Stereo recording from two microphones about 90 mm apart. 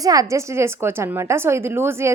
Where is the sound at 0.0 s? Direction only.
40° right (ahead or behind).